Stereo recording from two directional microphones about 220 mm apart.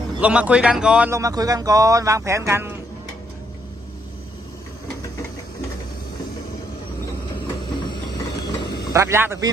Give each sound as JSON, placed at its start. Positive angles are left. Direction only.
{"t": 0.2, "sound": "speech", "side_deg": -5}
{"t": 7.7, "sound": "ratchet", "side_deg": 20}
{"t": 8.9, "sound": "speech", "side_deg": -10}